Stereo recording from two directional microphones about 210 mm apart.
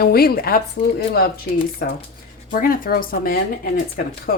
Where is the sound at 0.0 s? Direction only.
45° left (ahead or behind).